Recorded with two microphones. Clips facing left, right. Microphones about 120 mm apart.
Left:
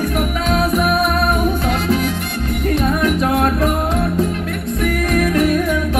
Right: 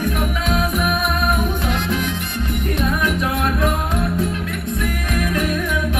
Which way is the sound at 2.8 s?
40° left (ahead or behind).